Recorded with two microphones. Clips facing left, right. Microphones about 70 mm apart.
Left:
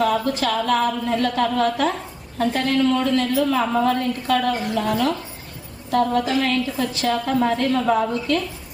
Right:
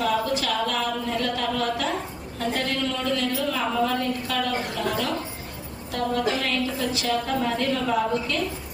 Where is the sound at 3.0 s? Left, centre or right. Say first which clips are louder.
Left 6 dB; left.